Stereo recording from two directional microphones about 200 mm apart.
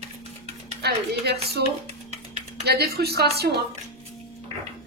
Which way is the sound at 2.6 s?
55° right (ahead or behind).